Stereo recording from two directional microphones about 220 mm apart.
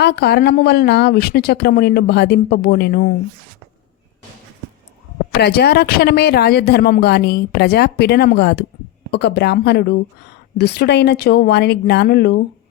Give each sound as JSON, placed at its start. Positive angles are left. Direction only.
{"t": 0.0, "sound": "speech", "side_deg": 50}
{"t": 5.4, "sound": "speech", "side_deg": 45}